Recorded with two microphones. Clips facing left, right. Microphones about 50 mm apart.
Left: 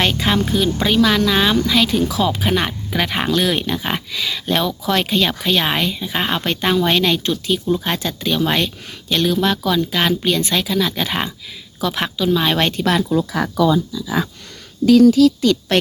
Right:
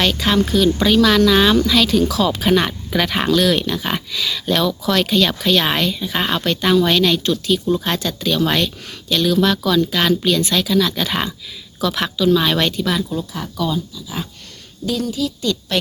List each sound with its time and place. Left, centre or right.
0.0 s speech: left
6.4 s speech: left
12.5 s speech: left
12.8 s speech: left
14.8 s speech: left
15.7 s a woman's voice: left